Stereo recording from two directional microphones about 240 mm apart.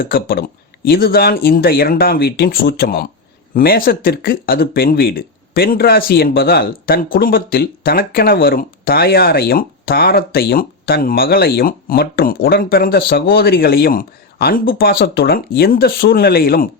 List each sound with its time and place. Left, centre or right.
0.0 s speech: left